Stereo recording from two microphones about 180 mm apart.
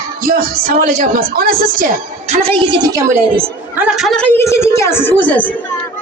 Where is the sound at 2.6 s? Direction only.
25° right (ahead or behind).